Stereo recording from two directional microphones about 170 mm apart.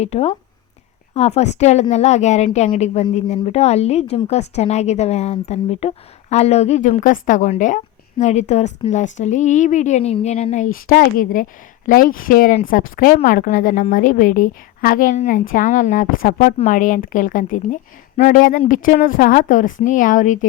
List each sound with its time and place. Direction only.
0.0 s a woman's voice: 35° left (ahead or behind)